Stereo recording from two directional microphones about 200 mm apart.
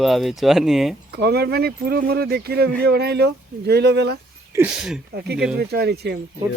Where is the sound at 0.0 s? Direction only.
Centre (ahead or behind).